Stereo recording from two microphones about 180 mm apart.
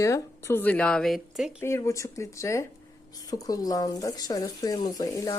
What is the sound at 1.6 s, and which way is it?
Speech, 15° left (ahead or behind).